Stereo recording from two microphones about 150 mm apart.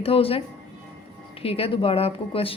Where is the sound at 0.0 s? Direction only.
40° left (ahead or behind).